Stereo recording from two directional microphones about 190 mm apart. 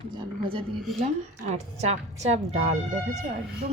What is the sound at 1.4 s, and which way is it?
A woman's voice, 35° right (ahead or behind).